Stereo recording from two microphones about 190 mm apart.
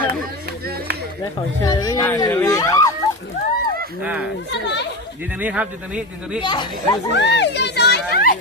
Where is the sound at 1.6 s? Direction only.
20° left (ahead or behind).